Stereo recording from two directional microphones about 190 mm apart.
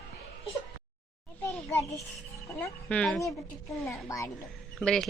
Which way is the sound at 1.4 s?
10° left (ahead or behind).